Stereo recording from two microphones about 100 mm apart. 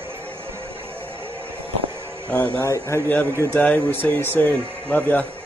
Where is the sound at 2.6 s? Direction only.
30° left (ahead or behind).